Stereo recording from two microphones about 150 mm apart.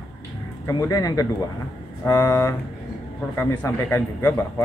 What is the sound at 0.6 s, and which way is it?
Speech, 20° left (ahead or behind).